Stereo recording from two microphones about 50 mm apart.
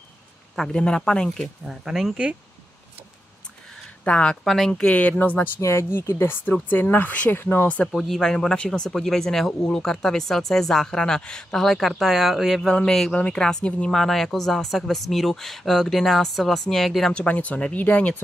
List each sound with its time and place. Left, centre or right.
0.7 s speech: centre
1.6 s speech: centre
4.0 s speech: left
5.2 s speech: left
5.6 s speech: left
7.1 s speech: left
7.3 s speech: left
7.6 s speech: left
7.9 s speech: centre
11.5 s speech: centre
12.6 s speech: centre
13.9 s speech: centre
17.1 s speech: left